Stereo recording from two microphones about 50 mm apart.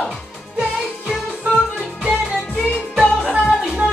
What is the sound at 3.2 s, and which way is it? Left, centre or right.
Music, centre.